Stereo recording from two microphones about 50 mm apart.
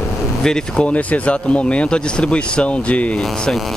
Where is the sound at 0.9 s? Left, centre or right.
Left.